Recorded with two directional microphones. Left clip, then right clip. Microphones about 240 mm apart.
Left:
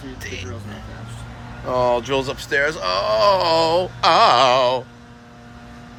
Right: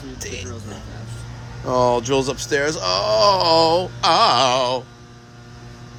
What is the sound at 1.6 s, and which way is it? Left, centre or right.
Speech, right.